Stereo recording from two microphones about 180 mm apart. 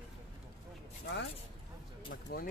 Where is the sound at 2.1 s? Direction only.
55° left (ahead or behind).